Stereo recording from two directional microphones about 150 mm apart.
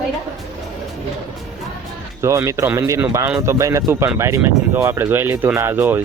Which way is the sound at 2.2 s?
20° right (ahead or behind).